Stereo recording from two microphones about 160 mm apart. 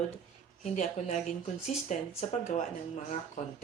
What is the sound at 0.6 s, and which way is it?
Speech, 50° left (ahead or behind).